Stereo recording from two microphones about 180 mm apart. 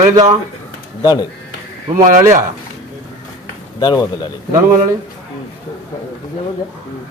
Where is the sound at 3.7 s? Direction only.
20° left (ahead or behind).